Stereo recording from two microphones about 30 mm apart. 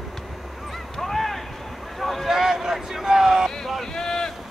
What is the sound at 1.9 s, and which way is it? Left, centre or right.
Boat, centre.